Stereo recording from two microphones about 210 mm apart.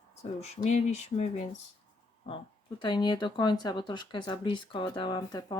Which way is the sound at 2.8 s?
20° left (ahead or behind).